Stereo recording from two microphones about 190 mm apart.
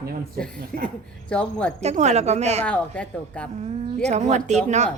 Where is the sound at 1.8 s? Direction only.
35° right (ahead or behind).